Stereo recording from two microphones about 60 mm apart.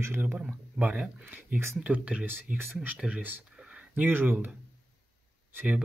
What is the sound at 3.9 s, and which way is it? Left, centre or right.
Speech, right.